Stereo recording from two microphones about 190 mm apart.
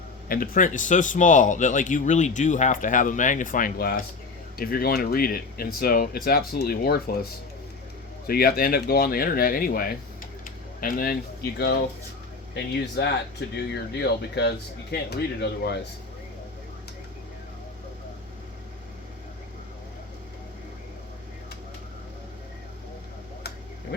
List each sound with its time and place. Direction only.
0.3 s a man's voice: 45° left (ahead or behind)
8.3 s speech: 50° left (ahead or behind)
11.5 s speech: 60° left (ahead or behind)